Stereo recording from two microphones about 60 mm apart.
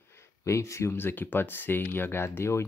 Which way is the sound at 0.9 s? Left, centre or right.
Left.